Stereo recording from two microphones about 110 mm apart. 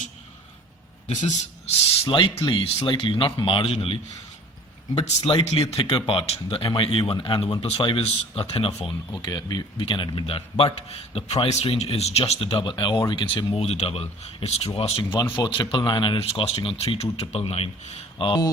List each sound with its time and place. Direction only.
1.0 s a man's voice: 90° left
2.0 s speech: 50° left (ahead or behind)
9.1 s speech: 40° left (ahead or behind); by 11.6 s 80° left
11.6 s speech: 60° left (ahead or behind)
13.7 s speech: 75° left (ahead or behind)
14.8 s speech: 60° left (ahead or behind)
15.7 s speech: 45° left (ahead or behind)
16.2 s speech: 65° left (ahead or behind)
18.2 s speech: 45° left (ahead or behind)